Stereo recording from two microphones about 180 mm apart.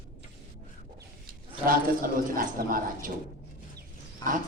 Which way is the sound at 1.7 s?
50° right (ahead or behind).